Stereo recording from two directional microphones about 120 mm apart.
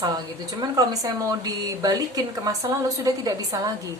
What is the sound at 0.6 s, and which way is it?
A woman's voice, 30° right (ahead or behind).